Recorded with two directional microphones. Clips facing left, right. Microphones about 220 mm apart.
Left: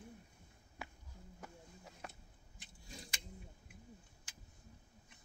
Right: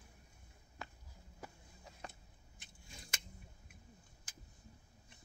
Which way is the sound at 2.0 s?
5° left (ahead or behind).